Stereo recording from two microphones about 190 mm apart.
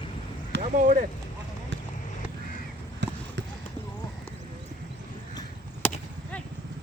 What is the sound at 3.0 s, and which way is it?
Basketball bounce, 70° right (ahead or behind).